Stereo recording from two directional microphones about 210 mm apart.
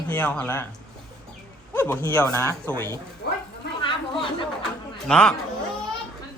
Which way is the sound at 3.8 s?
25° left (ahead or behind).